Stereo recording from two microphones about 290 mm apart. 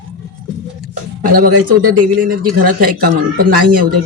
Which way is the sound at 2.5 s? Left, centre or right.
Right.